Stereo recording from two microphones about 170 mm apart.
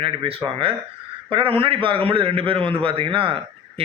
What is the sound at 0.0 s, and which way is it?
A man's voice, 30° right (ahead or behind).